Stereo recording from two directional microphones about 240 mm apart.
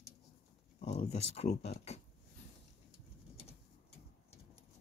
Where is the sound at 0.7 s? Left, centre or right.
Left.